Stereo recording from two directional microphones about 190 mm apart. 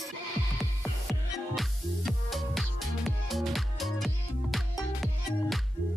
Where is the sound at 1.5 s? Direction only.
Centre (ahead or behind).